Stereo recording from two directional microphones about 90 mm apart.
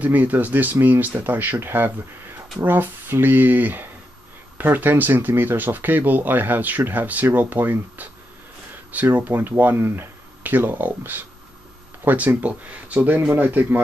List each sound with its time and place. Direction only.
0.0 s speech: 20° right (ahead or behind)